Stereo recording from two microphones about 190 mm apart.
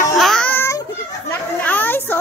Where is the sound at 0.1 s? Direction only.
Centre (ahead or behind).